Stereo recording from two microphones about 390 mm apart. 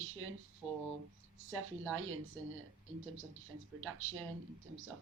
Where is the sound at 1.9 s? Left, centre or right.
Right.